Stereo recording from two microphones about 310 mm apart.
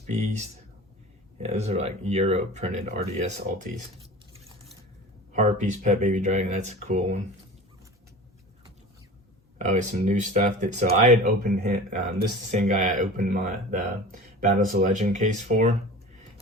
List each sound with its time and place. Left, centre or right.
0.1 s speech: right
5.3 s speech: right
9.6 s speech: right